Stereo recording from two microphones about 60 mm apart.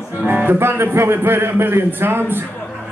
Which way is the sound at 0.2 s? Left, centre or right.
Right.